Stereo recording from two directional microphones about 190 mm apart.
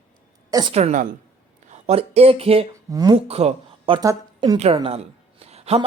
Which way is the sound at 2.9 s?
20° right (ahead or behind).